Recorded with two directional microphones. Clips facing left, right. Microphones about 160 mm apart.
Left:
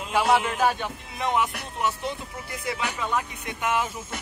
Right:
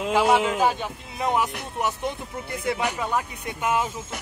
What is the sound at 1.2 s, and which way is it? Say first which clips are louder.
Music: right 1 dB; 35° right (ahead or behind).